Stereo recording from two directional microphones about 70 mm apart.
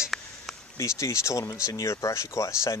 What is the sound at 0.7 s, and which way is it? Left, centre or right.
Speech, left.